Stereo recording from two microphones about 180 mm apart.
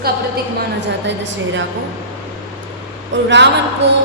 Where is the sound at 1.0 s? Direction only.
80° right.